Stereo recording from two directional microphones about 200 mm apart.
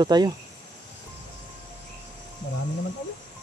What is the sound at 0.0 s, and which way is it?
Speech, 20° right (ahead or behind).